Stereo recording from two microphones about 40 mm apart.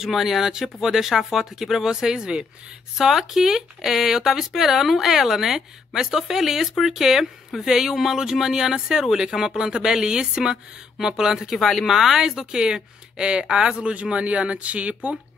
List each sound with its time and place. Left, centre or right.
0.0 s speech: centre
3.0 s speech: centre
11.5 s speech: centre
11.9 s speech: centre; by 15.0 s right